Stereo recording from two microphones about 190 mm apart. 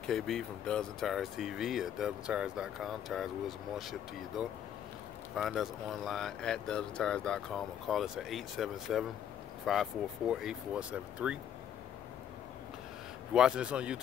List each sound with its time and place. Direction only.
0.0 s speech: 5° left (ahead or behind)
5.3 s speech: centre (ahead or behind)
13.3 s speech: 5° right (ahead or behind)